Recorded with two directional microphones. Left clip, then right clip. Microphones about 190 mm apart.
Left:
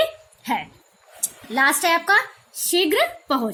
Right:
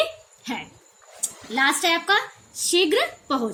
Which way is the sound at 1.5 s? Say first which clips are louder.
Left 2 dB; 45° left (ahead or behind).